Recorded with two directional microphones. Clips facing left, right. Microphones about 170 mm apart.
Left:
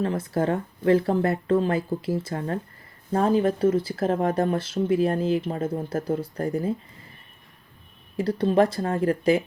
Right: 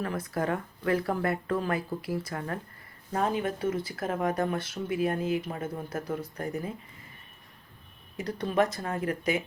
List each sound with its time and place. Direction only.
0.0 s speech: 25° left (ahead or behind)
8.1 s speech: 30° left (ahead or behind)